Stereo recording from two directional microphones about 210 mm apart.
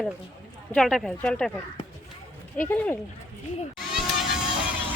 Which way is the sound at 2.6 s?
10° left (ahead or behind).